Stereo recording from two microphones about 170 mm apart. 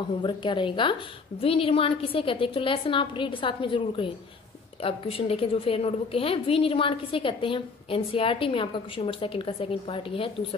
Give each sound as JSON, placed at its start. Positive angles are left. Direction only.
{"t": 0.2, "sound": "a woman's voice", "side_deg": 30}